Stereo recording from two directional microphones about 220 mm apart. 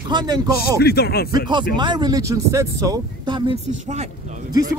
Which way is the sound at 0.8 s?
45° left (ahead or behind).